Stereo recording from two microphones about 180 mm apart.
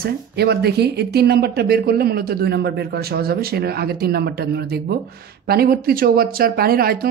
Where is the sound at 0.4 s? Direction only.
65° right (ahead or behind).